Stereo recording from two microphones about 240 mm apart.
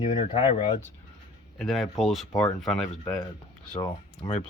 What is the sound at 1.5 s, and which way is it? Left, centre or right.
Speech, centre.